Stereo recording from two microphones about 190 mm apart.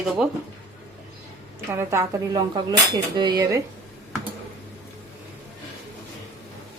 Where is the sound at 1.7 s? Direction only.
15° right (ahead or behind).